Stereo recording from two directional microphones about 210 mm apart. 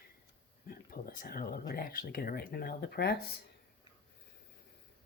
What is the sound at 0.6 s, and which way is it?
Speech, 45° left (ahead or behind).